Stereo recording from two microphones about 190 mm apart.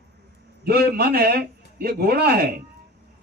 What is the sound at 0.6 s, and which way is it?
A man's voice, 55° right (ahead or behind).